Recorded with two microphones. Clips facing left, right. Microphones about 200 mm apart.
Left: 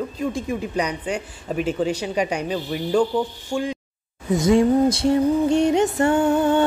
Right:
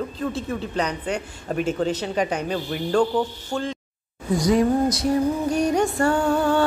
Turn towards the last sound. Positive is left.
turn(degrees=20)  # may be behind; listen again after turning